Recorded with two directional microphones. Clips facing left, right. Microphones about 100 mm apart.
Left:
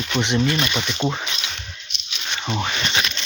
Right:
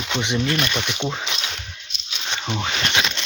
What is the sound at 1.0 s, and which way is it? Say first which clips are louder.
Speech: left 3 dB; 5° left (ahead or behind).